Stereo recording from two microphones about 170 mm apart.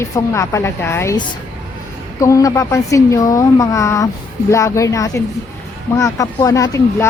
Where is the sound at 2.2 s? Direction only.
20° left (ahead or behind).